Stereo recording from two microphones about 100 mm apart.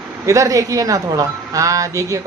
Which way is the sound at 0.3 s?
35° right (ahead or behind).